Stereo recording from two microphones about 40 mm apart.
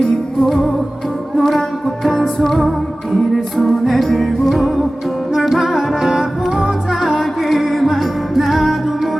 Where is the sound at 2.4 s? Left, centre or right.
Centre.